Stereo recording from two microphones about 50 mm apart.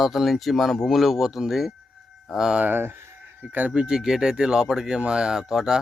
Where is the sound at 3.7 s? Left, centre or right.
Centre.